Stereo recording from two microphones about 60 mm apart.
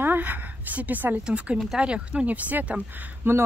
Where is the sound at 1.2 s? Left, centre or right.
Centre.